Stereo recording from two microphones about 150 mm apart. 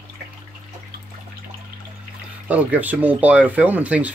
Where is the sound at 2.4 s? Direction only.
10° right (ahead or behind).